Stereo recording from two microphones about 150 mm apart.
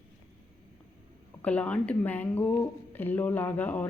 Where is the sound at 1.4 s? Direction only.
10° left (ahead or behind).